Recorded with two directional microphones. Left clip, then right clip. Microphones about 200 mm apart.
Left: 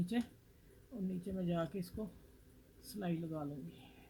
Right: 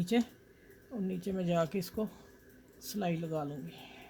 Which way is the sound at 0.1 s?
40° right (ahead or behind).